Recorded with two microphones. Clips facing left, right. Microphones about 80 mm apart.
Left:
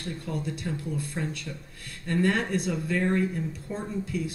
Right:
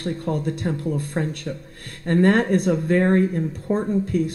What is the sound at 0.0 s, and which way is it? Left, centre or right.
A man's voice, right.